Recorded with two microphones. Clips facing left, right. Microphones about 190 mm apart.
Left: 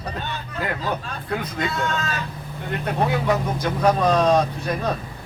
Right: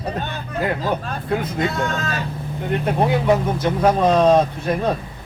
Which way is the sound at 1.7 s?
45° right (ahead or behind).